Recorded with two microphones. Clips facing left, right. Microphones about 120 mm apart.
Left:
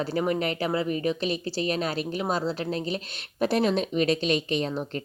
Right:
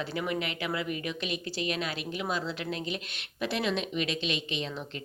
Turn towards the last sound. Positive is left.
turn(degrees=45)  # may be behind; listen again after turning